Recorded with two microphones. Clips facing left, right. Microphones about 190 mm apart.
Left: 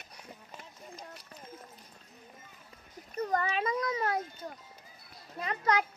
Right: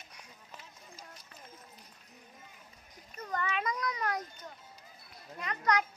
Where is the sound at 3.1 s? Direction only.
35° left (ahead or behind).